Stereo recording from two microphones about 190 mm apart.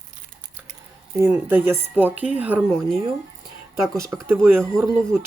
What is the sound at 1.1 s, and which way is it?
Speech, 10° right (ahead or behind).